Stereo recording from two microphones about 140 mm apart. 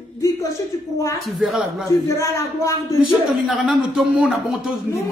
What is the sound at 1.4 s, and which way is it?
Speech, 5° right (ahead or behind).